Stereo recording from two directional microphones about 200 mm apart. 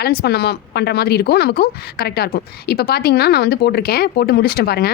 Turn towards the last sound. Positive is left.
turn(degrees=50)  # may be behind; listen again after turning